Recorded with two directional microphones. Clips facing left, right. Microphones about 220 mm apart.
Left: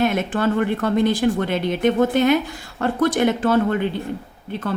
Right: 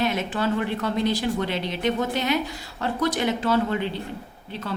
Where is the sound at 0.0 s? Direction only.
50° left (ahead or behind).